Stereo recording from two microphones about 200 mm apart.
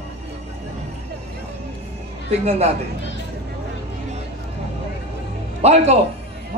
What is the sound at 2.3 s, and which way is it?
Speech, 30° right (ahead or behind).